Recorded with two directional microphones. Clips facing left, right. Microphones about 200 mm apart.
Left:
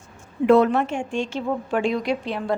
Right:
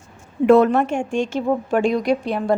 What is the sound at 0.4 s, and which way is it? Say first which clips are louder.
A woman's voice: right 3 dB; 50° right (ahead or behind).